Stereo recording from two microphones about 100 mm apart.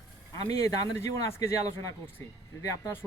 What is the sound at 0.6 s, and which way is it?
Speech, 30° left (ahead or behind).